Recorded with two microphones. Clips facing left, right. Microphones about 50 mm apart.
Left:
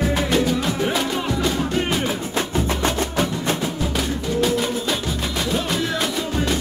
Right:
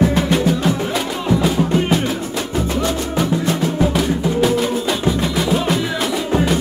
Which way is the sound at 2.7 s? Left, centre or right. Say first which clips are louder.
Right 2 dB; left.